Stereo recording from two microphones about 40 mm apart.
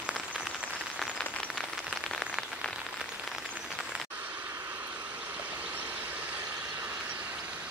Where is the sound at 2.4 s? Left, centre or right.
Right.